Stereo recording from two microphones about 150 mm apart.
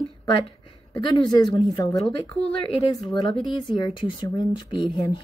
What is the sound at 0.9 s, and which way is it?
Speech, 25° left (ahead or behind).